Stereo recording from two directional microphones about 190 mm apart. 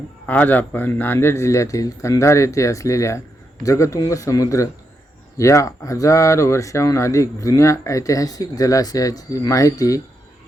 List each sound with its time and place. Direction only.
0.3 s speech: 10° left (ahead or behind)